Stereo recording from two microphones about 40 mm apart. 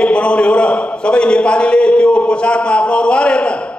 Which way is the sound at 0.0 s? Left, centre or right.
Left.